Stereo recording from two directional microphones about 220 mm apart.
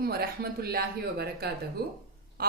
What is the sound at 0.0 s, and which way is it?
A woman's voice, 45° right (ahead or behind).